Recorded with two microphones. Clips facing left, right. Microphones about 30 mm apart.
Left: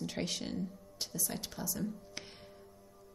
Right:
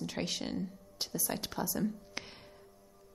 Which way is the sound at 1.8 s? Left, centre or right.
Centre.